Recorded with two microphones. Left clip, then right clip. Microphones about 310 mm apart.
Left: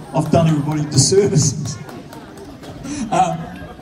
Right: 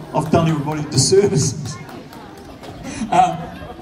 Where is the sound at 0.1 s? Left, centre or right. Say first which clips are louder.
Left 1 dB; centre.